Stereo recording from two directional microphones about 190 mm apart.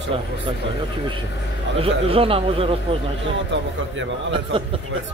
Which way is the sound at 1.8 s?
30° right (ahead or behind).